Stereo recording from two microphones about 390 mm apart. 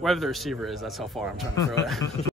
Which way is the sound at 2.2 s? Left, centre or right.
Centre.